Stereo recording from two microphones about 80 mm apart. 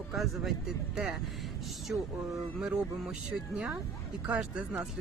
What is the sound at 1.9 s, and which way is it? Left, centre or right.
Speech, right.